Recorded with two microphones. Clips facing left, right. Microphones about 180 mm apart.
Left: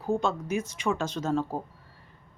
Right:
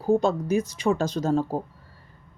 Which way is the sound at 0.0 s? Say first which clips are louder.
Right 6 dB; 35° right (ahead or behind).